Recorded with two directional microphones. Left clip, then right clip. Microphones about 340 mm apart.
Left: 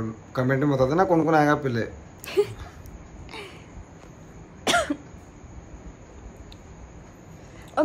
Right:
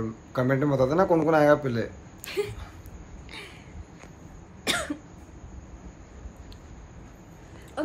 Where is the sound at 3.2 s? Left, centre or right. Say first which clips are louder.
Left 3 dB; centre.